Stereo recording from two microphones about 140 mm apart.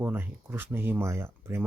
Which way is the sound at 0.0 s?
15° right (ahead or behind).